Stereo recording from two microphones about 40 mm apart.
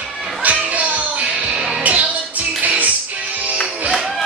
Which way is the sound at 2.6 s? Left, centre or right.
Right.